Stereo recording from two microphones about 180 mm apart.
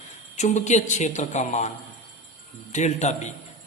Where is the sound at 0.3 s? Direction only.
40° left (ahead or behind).